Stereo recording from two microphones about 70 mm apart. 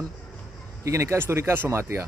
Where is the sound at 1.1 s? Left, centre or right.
Right.